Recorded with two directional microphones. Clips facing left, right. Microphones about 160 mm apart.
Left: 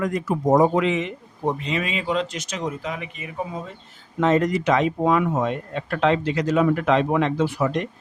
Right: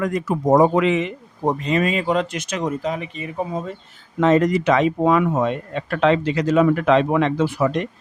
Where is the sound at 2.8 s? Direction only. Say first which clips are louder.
Right 5 dB; 35° right (ahead or behind).